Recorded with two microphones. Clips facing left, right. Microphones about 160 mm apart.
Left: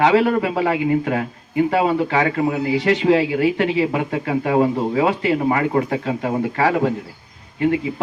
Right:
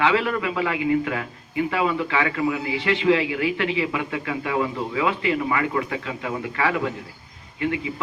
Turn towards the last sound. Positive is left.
turn(degrees=50)  # may be behind; listen again after turning